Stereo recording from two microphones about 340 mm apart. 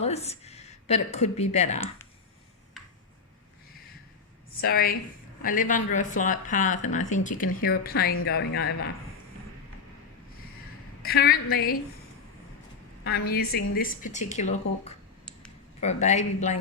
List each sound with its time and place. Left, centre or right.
0.0 s speech: centre
4.6 s speech: left
11.0 s a woman's voice: left
13.1 s speech: left